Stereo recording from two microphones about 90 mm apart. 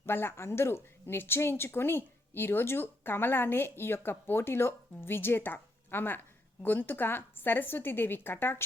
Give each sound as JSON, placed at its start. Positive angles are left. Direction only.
{"t": 0.0, "sound": "a woman's voice", "side_deg": 25}